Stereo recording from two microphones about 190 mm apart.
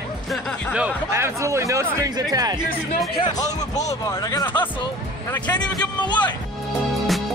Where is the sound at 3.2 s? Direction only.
20° left (ahead or behind).